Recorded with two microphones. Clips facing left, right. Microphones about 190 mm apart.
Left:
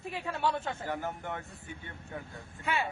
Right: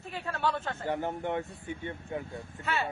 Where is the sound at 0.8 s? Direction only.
25° right (ahead or behind).